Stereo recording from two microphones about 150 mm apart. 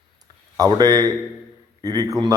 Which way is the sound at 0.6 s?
25° right (ahead or behind).